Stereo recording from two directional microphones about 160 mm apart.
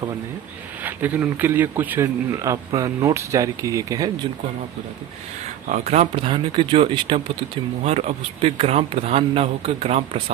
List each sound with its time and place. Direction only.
0.9 s speech: 10° right (ahead or behind)
5.6 s speech: 45° right (ahead or behind)